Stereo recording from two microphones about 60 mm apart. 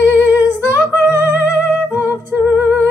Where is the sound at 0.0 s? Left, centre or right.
Right.